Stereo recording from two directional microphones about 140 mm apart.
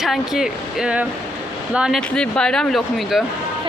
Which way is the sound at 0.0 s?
5° right (ahead or behind).